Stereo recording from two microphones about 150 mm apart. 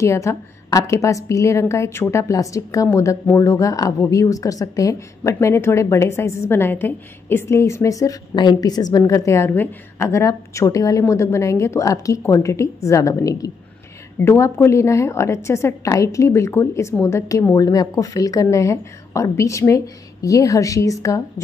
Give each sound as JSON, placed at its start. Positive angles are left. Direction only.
{"t": 0.0, "sound": "a woman's voice", "side_deg": 20}